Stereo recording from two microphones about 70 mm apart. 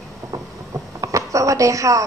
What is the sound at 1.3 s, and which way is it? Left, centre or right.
Speech, right.